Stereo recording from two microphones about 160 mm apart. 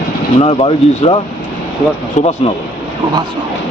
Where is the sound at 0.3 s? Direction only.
35° left (ahead or behind).